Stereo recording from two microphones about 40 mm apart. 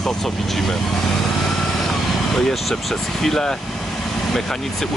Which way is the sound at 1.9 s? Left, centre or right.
Centre.